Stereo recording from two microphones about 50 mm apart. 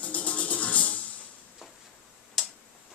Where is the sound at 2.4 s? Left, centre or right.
Centre.